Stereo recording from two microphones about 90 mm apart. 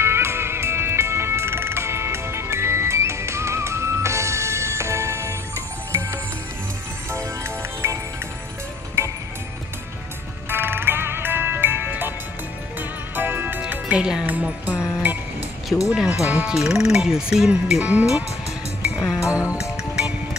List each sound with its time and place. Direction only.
0.0 s music: 30° right (ahead or behind)
7.8 s music: 30° right (ahead or behind)
10.5 s music: 25° right (ahead or behind)
13.1 s music: 20° right (ahead or behind)
14.7 s music: 30° left (ahead or behind)
15.9 s speech: 10° right (ahead or behind)
18.8 s music: 10° right (ahead or behind)